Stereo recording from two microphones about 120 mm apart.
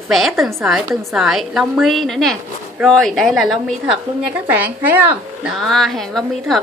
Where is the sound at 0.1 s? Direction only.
Centre (ahead or behind).